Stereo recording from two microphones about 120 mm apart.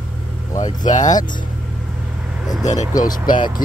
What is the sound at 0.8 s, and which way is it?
Speech, 90° left.